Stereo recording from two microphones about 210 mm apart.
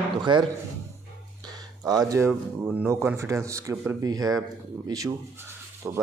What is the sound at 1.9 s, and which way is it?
Speech, 15° right (ahead or behind).